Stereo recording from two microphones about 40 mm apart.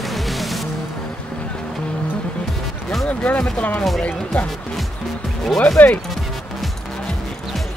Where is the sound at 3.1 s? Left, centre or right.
Left.